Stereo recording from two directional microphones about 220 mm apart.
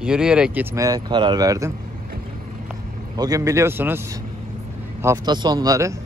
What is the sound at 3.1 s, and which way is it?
Speech, 15° right (ahead or behind).